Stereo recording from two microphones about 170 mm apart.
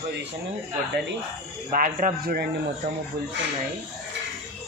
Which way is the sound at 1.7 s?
55° right (ahead or behind).